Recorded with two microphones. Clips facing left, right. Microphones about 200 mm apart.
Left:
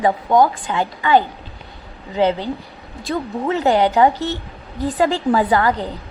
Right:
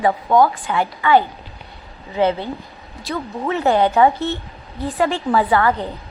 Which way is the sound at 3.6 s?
15° left (ahead or behind).